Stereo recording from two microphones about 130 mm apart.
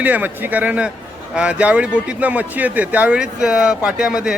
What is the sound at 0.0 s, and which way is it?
Speech, 15° right (ahead or behind).